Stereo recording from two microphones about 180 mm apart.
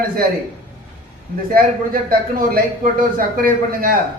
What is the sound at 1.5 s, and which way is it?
A man's voice, 55° right (ahead or behind).